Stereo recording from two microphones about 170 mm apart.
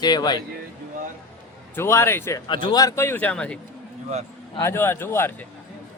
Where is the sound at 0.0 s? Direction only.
25° left (ahead or behind).